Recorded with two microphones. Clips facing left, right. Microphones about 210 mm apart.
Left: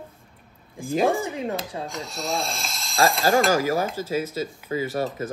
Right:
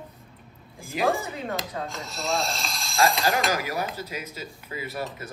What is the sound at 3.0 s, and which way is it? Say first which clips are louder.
Speech: left 4 dB; 45° left (ahead or behind).